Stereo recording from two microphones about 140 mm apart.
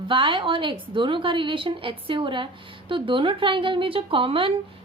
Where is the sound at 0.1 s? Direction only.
35° right (ahead or behind).